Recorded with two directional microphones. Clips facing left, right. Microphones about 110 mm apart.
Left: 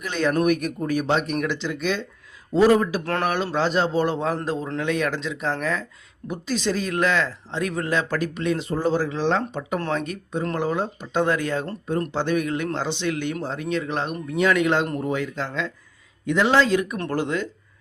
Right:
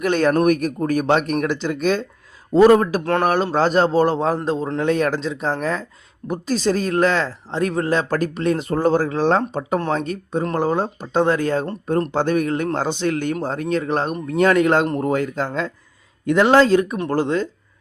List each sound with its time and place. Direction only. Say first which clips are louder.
0.0 s speech: right 5 dB; 50° right (ahead or behind)
2.6 s speech: right 5 dB; 55° right (ahead or behind)
3.0 s speech: right 6 dB; 25° right (ahead or behind)
3.2 s speech: right 4 dB; 40° right (ahead or behind)
4.8 s speech: right 6 dB; 40° right (ahead or behind)